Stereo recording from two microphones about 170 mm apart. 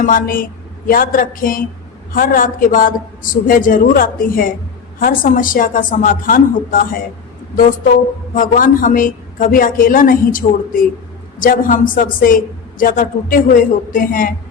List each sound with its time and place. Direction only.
0.0 s a woman's voice: 55° left (ahead or behind)